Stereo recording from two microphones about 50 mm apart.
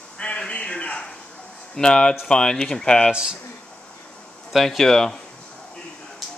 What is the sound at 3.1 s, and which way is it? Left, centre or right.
Speech, centre.